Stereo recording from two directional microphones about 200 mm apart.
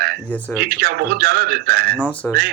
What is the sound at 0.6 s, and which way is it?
Speech, 50° right (ahead or behind).